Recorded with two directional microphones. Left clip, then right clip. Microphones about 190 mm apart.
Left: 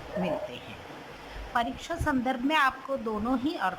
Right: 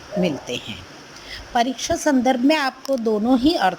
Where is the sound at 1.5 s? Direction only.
35° right (ahead or behind).